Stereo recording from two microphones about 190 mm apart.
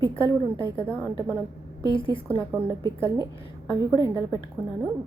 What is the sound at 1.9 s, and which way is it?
Speech, 25° left (ahead or behind).